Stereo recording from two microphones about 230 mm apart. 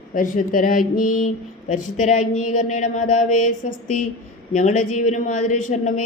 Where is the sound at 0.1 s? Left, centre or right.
Left.